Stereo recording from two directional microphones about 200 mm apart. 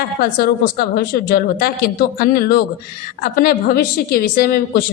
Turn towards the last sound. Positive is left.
turn(degrees=50)  # may be behind; listen again after turning